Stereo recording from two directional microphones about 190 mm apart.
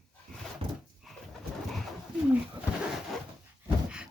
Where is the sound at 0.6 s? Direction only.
30° right (ahead or behind).